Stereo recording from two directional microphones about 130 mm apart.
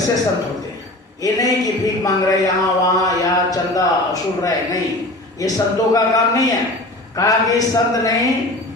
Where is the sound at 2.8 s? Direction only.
25° left (ahead or behind).